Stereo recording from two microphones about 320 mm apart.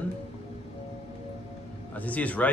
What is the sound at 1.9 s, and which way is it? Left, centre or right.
Speech, centre.